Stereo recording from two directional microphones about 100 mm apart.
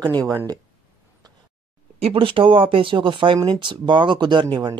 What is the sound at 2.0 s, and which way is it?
Speech, 65° right (ahead or behind).